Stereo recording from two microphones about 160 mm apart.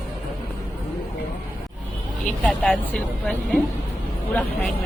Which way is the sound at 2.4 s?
10° left (ahead or behind).